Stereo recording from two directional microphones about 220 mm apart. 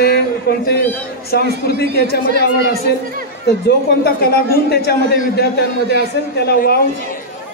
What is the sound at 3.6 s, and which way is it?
A man's voice, 45° left (ahead or behind).